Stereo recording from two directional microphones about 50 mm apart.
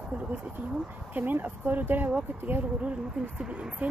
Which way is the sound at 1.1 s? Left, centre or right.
Right.